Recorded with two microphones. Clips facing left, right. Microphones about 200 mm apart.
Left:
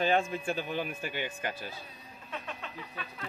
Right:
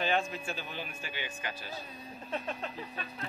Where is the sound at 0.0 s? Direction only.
50° left (ahead or behind).